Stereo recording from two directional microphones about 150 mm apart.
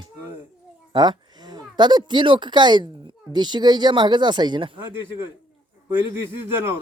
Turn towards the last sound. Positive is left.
turn(degrees=-15)  # may be behind; listen again after turning